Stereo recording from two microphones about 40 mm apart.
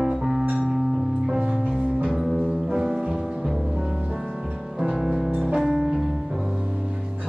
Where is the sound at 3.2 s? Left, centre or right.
Centre.